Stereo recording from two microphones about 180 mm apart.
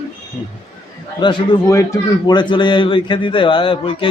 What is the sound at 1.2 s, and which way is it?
A man's voice, 20° left (ahead or behind).